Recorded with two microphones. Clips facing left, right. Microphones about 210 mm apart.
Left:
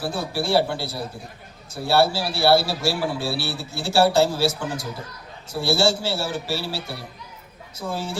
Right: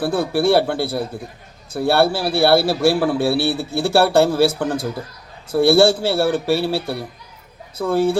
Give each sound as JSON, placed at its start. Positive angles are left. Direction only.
{"t": 0.0, "sound": "a man's voice", "side_deg": -55}